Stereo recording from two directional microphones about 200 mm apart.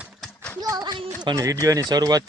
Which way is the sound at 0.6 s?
20° right (ahead or behind).